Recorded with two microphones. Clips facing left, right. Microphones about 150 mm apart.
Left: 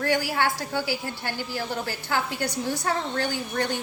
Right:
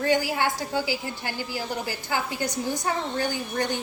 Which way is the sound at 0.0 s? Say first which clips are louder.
Right 1 dB; 20° right (ahead or behind).